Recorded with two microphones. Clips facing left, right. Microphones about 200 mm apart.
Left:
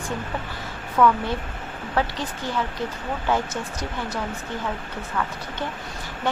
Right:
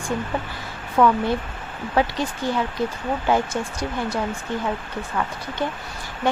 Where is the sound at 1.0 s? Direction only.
25° right (ahead or behind).